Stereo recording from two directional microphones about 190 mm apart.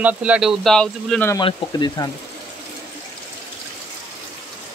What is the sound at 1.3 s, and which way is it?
Speech, 20° left (ahead or behind).